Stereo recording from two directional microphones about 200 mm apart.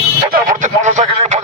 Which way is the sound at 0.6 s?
35° right (ahead or behind).